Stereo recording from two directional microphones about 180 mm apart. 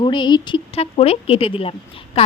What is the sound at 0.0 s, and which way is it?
Speech, 25° left (ahead or behind).